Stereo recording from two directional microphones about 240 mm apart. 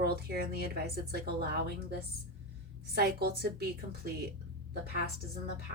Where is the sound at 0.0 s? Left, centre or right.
Right.